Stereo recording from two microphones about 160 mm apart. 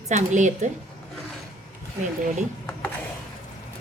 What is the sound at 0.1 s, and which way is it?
Speech, 50° right (ahead or behind).